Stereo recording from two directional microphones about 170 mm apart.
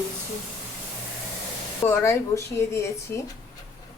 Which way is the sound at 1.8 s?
15° left (ahead or behind).